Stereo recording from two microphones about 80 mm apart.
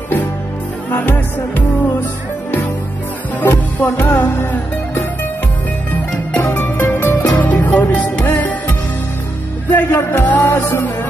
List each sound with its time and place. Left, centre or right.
0.9 s music: left
3.3 s music: left
6.3 s music: left
7.2 s music: centre
9.7 s music: left